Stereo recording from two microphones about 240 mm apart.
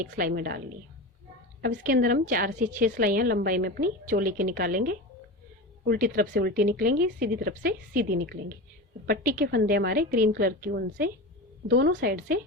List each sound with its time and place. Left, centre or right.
0.0 s a woman's voice: right
1.6 s a woman's voice: right